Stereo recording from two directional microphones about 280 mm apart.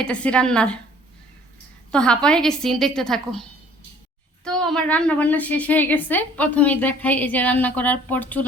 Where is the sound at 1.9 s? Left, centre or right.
Centre.